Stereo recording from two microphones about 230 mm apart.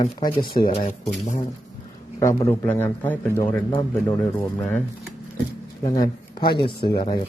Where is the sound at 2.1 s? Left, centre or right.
Centre.